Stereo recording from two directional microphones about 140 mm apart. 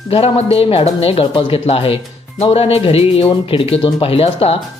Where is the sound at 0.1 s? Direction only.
45° left (ahead or behind).